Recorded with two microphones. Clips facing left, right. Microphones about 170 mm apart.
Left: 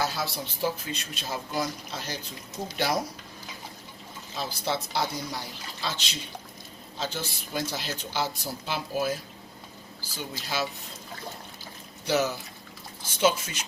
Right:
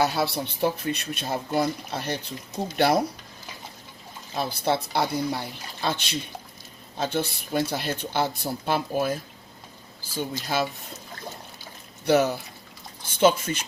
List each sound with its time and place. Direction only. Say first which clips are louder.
0.0 s speech: right 6 dB; 65° right (ahead or behind)
4.4 s speech: right 5 dB; 55° right (ahead or behind)
12.0 s speech: right 5 dB; 55° right (ahead or behind)